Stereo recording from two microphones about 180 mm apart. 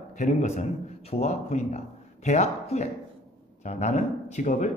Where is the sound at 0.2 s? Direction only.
40° left (ahead or behind).